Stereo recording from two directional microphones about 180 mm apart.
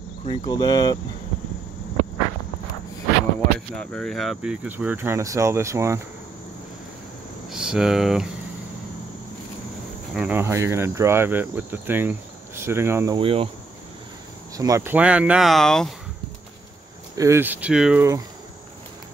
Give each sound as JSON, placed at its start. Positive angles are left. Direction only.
{"t": 0.2, "sound": "speech", "side_deg": 25}
{"t": 3.3, "sound": "cricket", "side_deg": 5}
{"t": 7.4, "sound": "speech", "side_deg": -5}
{"t": 10.1, "sound": "cricket", "side_deg": -10}
{"t": 13.2, "sound": "cricket", "side_deg": -30}
{"t": 14.6, "sound": "cricket", "side_deg": -15}
{"t": 17.2, "sound": "cricket", "side_deg": -15}